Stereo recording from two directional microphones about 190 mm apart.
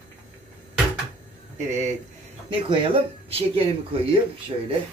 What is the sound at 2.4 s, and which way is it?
Speech, 25° right (ahead or behind).